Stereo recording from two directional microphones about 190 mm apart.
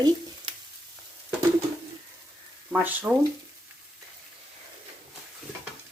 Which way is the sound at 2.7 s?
10° right (ahead or behind).